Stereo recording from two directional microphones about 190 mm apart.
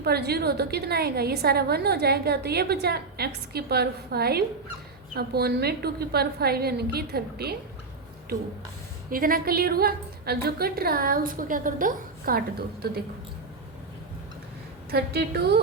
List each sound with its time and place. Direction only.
0.0 s a woman's voice: 55° right (ahead or behind)
9.0 s a woman's voice: 50° right (ahead or behind)
14.8 s a woman's voice: 55° right (ahead or behind)